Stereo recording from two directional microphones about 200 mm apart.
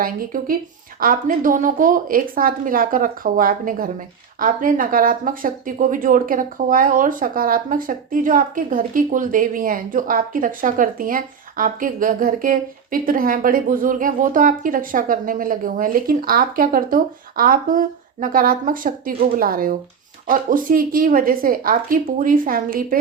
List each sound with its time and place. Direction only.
0.0 s speech: 45° right (ahead or behind)